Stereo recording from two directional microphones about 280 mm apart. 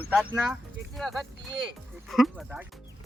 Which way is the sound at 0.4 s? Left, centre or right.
Centre.